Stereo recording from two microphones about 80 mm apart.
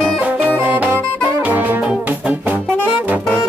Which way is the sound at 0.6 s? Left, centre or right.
Right.